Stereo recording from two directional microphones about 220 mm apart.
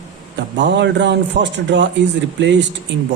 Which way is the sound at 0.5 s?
55° right (ahead or behind).